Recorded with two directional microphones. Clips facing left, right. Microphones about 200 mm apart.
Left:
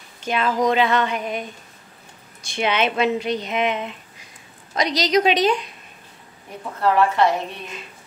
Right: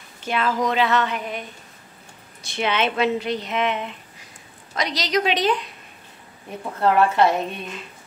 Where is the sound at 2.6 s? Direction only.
15° left (ahead or behind).